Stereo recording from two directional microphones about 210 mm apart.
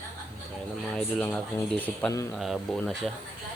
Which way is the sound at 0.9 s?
5° left (ahead or behind).